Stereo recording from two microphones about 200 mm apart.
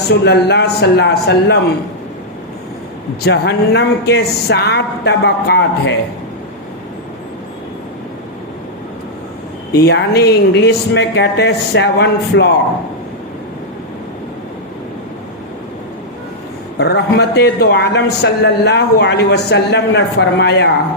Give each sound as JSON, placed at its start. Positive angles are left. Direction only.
{"t": 0.1, "sound": "a man's voice", "side_deg": 55}
{"t": 3.2, "sound": "a man's voice", "side_deg": 55}
{"t": 9.7, "sound": "a man's voice", "side_deg": 55}
{"t": 16.7, "sound": "a man's voice", "side_deg": 55}